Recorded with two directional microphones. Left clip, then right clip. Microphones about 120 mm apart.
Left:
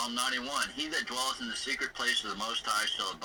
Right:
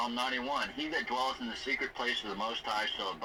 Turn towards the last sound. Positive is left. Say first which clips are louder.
# left 2 dB
turn(degrees=30)  # may be behind; listen again after turning